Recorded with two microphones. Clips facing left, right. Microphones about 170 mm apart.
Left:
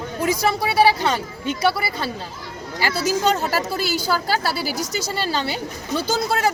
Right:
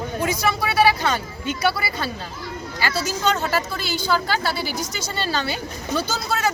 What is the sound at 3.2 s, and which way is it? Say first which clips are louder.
Speech: even; 35° left (ahead or behind).